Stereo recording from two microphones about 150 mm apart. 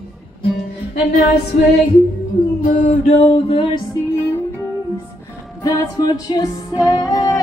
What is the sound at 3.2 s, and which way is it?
Music, 40° left (ahead or behind).